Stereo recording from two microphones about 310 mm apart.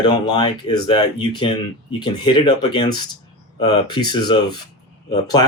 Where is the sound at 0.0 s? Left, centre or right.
Centre.